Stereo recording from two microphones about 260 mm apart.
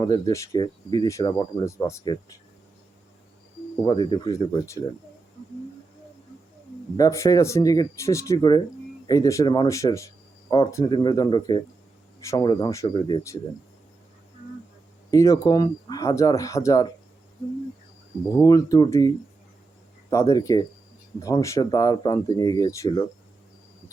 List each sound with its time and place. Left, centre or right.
0.0 s speech: centre
3.8 s speech: centre
6.9 s speech: centre
15.1 s speech: centre
18.3 s speech: centre